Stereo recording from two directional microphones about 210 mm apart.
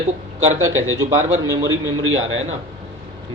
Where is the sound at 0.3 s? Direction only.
70° right (ahead or behind).